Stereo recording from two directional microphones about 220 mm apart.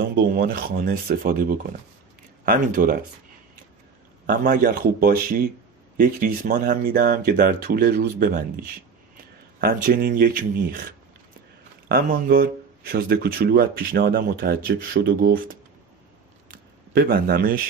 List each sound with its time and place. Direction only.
0.0 s speech: 45° right (ahead or behind)
4.3 s speech: 40° right (ahead or behind)
11.9 s speech: 40° right (ahead or behind)
16.4 s a sound: 45° right (ahead or behind)